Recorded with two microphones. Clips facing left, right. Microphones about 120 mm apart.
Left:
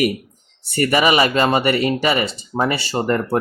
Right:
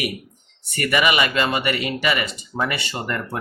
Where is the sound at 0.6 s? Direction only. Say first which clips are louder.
Left 4 dB; 35° left (ahead or behind).